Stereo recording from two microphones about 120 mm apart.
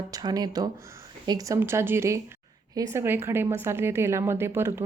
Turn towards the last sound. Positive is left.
turn(degrees=-20)  # may be behind; listen again after turning